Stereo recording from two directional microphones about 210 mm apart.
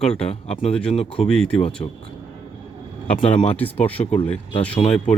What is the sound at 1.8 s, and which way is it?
Speech, 25° left (ahead or behind).